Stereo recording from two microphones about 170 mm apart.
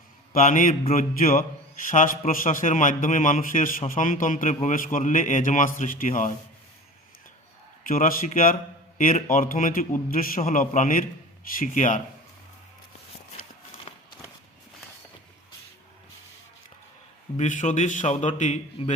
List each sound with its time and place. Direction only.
0.3 s a man's voice: 50° left (ahead or behind)
7.9 s a man's voice: 55° left (ahead or behind)
17.3 s a man's voice: 45° left (ahead or behind)